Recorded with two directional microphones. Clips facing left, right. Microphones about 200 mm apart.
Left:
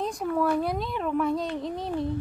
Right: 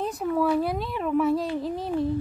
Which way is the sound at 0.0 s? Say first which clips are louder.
Right 1 dB; 5° right (ahead or behind).